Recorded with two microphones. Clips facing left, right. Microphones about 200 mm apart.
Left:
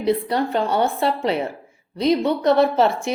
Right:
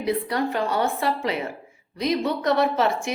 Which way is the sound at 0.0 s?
30° left (ahead or behind).